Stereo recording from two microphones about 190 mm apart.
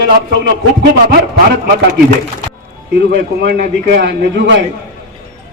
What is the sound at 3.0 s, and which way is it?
A man's voice, 60° right (ahead or behind).